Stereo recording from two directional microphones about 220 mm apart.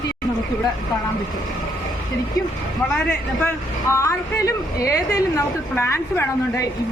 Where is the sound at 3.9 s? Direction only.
15° left (ahead or behind).